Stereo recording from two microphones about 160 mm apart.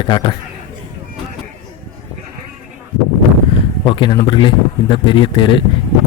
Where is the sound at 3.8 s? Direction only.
30° left (ahead or behind).